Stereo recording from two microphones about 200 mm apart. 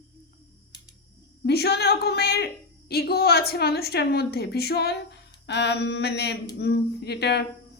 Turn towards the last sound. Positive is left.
turn(degrees=55)  # may be behind; listen again after turning